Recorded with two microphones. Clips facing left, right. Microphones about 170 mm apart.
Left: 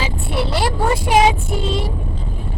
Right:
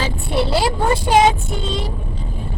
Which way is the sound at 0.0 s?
Centre (ahead or behind).